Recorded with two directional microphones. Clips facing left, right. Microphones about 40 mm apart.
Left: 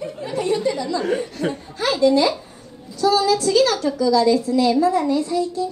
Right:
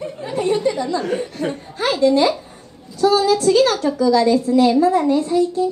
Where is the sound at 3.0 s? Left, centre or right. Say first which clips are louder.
Right 2 dB; right.